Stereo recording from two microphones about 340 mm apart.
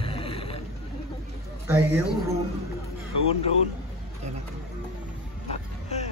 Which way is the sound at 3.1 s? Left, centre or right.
Right.